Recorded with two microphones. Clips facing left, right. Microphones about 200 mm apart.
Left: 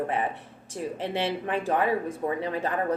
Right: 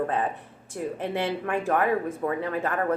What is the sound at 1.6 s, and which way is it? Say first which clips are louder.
A woman's voice: right 1 dB; 15° left (ahead or behind).